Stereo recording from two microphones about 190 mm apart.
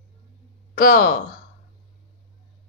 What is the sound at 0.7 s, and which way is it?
Speech, 45° left (ahead or behind).